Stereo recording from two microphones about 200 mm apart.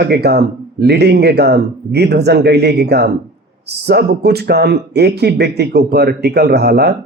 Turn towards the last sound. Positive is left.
turn(degrees=-50)  # may be behind; listen again after turning